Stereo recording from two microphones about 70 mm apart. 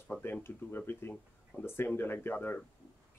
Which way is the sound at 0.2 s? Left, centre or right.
Left.